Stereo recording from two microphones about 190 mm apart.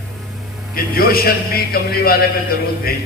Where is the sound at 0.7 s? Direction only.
50° left (ahead or behind).